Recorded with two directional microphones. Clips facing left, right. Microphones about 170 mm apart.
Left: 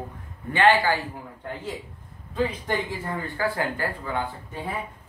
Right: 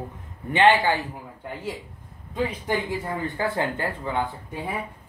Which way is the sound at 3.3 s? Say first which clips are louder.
Even; 20° right (ahead or behind).